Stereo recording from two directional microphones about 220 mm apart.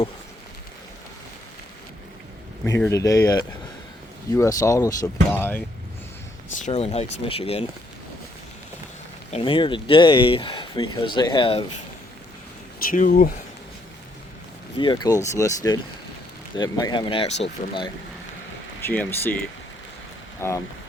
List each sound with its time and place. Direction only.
2.6 s speech: 10° left (ahead or behind)
6.6 s speech: 25° left (ahead or behind)
9.3 s speech: 25° left (ahead or behind)
12.9 s speech: 40° left (ahead or behind)
14.8 s speech: 20° left (ahead or behind)
18.8 s speech: 10° left (ahead or behind)
20.4 s speech: 10° left (ahead or behind)